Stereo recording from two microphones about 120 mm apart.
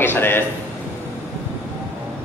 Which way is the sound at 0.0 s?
20° left (ahead or behind).